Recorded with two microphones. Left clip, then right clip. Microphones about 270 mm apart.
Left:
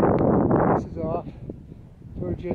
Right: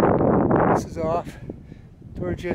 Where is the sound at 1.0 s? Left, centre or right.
Centre.